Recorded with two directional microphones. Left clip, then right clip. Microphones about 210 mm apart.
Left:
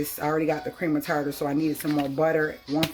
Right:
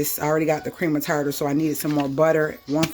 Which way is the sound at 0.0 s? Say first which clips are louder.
Right 4 dB; 45° right (ahead or behind).